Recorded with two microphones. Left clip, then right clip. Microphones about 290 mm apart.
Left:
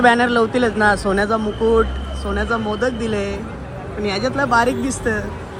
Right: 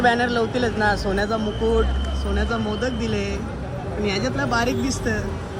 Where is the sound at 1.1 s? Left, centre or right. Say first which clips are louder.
Left 5 dB; left.